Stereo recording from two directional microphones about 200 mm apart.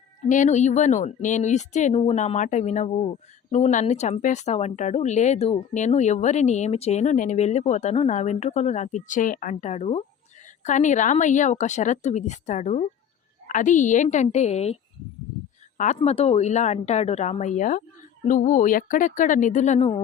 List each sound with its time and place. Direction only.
0.2 s a woman's voice: 40° left (ahead or behind)
16.0 s a woman's voice: 30° left (ahead or behind)